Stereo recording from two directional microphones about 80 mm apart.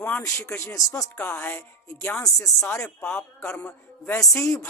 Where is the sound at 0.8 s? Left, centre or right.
Left.